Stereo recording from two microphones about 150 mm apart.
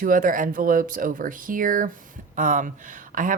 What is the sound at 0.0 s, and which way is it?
Speech, 65° right (ahead or behind).